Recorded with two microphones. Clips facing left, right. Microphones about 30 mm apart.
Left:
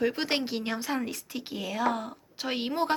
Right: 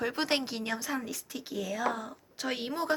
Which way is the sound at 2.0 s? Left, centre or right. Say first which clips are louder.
Left 1 dB; left.